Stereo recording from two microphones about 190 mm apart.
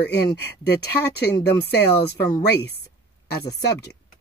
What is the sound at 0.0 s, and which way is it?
Speech, 60° left (ahead or behind).